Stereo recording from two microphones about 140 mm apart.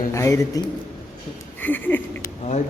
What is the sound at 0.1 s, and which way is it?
Speech, 20° left (ahead or behind).